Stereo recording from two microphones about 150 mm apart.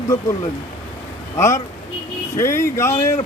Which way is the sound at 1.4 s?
20° left (ahead or behind).